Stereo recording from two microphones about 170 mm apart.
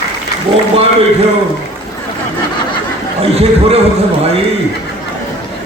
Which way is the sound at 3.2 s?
35° right (ahead or behind).